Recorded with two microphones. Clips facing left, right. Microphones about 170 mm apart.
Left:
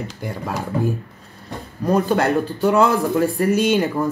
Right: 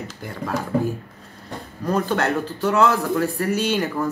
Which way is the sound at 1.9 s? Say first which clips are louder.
Left 4 dB; 15° left (ahead or behind).